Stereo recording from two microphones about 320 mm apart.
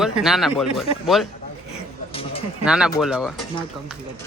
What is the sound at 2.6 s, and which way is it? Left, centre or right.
Speech, centre.